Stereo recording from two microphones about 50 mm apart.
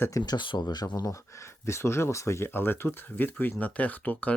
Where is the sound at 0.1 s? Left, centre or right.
Left.